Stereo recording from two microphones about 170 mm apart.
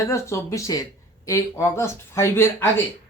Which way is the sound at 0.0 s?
15° left (ahead or behind).